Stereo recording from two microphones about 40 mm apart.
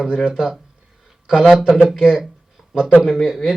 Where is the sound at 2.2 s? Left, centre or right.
Centre.